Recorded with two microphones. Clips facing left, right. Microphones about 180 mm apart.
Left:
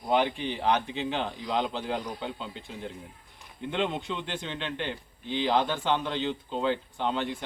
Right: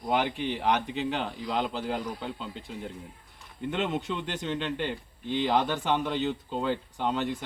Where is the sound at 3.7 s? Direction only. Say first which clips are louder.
Even; 5° right (ahead or behind).